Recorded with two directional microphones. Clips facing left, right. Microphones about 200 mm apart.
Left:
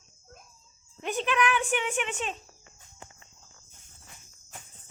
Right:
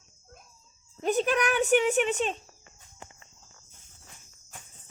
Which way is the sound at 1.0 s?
40° right (ahead or behind).